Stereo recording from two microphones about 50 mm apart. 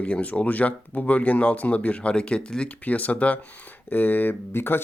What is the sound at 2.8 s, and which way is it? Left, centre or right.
Speech, left.